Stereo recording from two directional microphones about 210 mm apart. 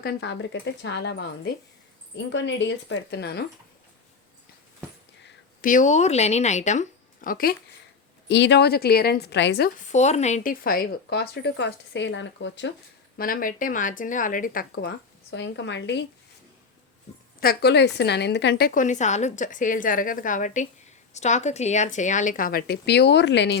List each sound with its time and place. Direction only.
0.0 s speech: 50° left (ahead or behind)
5.6 s a woman's voice: 35° left (ahead or behind)
8.3 s speech: 55° left (ahead or behind)
9.9 s speech: 35° left (ahead or behind); by 12.7 s 60° left (ahead or behind)
13.1 s speech: 40° left (ahead or behind)
17.4 s a woman's voice: 50° left (ahead or behind)